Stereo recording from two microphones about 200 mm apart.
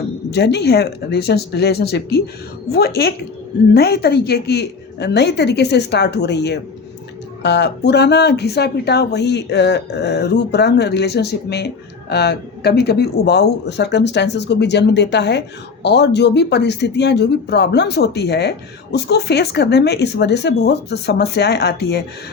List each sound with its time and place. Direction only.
0.3 s speech: 55° left (ahead or behind)